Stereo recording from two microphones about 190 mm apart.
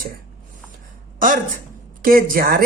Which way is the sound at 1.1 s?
45° right (ahead or behind).